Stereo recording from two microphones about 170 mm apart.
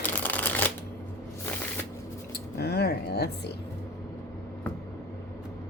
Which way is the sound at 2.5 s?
70° left (ahead or behind).